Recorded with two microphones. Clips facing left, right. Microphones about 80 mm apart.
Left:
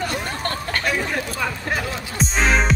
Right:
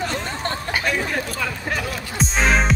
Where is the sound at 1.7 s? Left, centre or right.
Centre.